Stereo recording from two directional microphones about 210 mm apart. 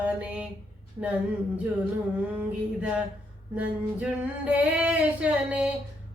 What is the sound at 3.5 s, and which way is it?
Female singing, 5° right (ahead or behind).